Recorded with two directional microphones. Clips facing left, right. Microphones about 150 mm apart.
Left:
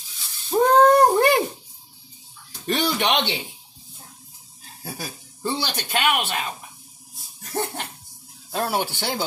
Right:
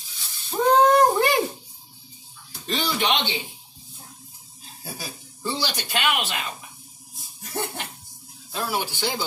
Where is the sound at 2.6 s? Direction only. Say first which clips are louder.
Left 2 dB; 60° left (ahead or behind).